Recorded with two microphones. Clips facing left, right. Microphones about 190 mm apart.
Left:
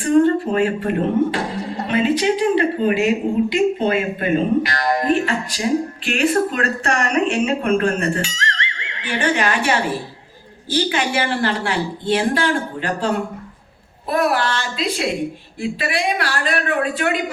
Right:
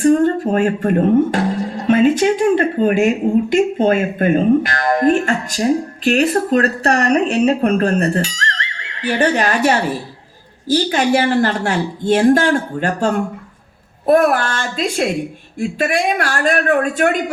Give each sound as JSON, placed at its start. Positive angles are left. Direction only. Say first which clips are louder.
{"t": 0.0, "sound": "speech", "louder": "right 2 dB", "side_deg": -45}